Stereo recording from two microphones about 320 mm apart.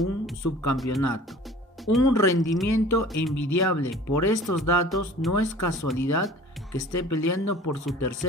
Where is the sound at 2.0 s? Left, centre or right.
Left.